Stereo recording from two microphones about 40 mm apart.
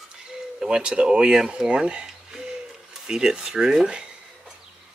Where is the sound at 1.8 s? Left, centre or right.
Centre.